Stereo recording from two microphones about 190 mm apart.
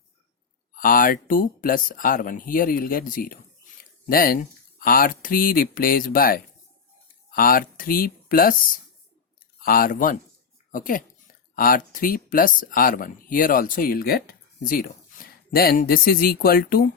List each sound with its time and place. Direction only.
0.7 s speech: 50° left (ahead or behind)
9.6 s speech: 50° left (ahead or behind)